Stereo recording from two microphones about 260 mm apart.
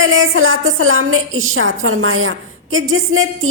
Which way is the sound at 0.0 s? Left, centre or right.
Right.